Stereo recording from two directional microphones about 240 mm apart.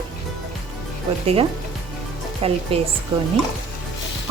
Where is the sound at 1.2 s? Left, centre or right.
Right.